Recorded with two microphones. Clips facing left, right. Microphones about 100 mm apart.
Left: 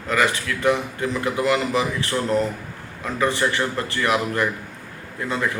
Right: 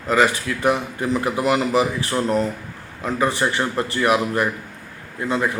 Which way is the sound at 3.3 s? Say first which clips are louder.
Right 1 dB; 25° right (ahead or behind).